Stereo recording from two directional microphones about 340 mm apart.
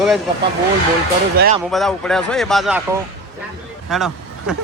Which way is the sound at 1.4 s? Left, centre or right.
Right.